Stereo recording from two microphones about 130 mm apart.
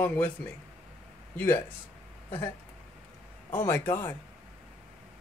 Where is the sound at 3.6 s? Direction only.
15° left (ahead or behind).